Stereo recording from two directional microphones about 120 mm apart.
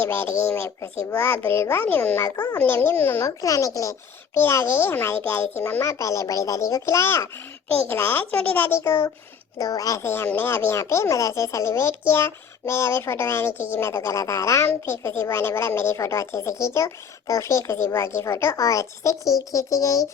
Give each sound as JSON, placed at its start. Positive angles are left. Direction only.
{"t": 0.0, "sound": "a child's voice", "side_deg": 20}
{"t": 2.3, "sound": "a child's voice", "side_deg": 35}
{"t": 2.6, "sound": "a child's voice", "side_deg": 20}
{"t": 3.2, "sound": "a child's voice", "side_deg": 30}